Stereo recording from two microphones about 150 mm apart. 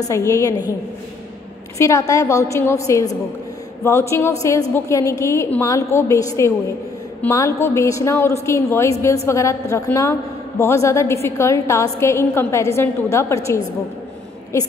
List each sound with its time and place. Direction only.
0.1 s a woman's voice: 20° left (ahead or behind)
1.8 s a woman's voice: 20° left (ahead or behind)